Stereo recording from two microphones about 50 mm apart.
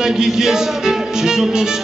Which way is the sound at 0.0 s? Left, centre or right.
Centre.